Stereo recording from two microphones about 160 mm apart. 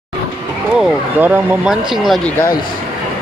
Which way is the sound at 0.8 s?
5° right (ahead or behind).